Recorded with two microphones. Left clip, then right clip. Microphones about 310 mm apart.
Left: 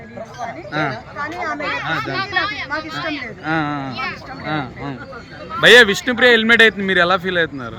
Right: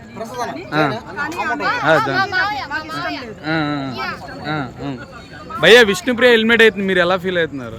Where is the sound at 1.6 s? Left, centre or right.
Centre.